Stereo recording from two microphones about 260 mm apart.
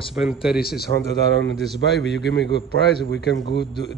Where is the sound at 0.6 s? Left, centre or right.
Left.